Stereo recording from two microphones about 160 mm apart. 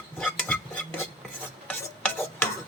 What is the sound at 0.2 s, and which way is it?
Cutlery, 10° left (ahead or behind).